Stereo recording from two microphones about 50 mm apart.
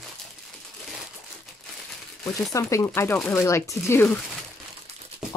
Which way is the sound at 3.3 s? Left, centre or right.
Left.